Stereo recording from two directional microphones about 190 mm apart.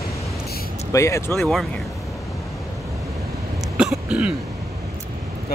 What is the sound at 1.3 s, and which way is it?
Vehicle, centre (ahead or behind).